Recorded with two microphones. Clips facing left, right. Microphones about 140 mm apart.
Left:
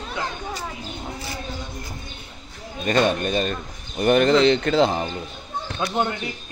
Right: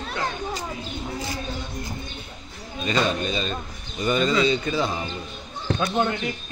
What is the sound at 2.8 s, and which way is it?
Speech, 55° left (ahead or behind).